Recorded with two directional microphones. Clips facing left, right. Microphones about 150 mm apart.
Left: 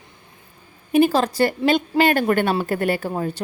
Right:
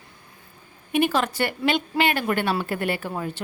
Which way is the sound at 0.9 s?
35° left (ahead or behind).